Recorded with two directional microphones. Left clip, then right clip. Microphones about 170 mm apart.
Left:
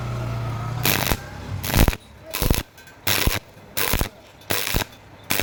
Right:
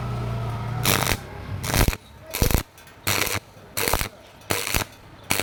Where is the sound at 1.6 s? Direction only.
5° left (ahead or behind).